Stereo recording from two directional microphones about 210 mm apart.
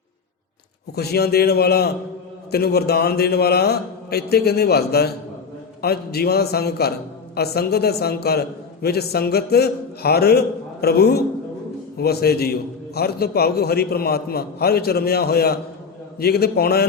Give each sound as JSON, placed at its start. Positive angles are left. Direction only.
{"t": 0.9, "sound": "a man's voice", "side_deg": 50}